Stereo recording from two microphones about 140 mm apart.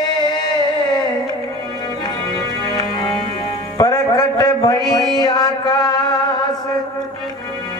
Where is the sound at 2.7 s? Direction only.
30° left (ahead or behind).